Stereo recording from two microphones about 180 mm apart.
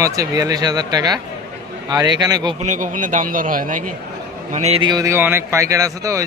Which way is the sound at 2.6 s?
45° right (ahead or behind).